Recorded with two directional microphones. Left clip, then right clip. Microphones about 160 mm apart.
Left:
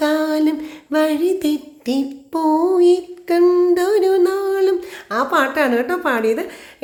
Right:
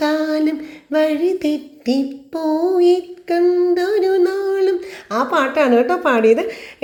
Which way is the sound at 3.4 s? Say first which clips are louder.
Left 1 dB; 30° left (ahead or behind).